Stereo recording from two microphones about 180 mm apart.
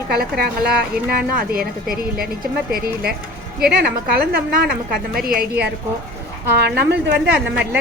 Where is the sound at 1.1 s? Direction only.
55° right (ahead or behind).